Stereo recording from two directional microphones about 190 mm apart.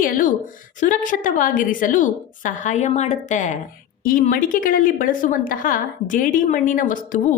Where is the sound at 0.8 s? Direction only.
40° left (ahead or behind).